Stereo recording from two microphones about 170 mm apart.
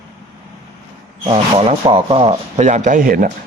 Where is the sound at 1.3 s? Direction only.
35° right (ahead or behind).